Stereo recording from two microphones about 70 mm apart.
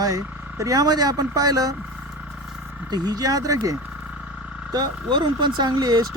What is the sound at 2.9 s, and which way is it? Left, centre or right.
Speech, right.